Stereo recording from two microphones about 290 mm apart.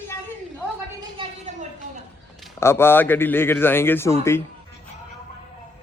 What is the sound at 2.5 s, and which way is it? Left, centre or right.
A man's voice, centre.